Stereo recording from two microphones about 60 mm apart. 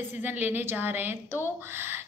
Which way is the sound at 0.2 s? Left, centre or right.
Right.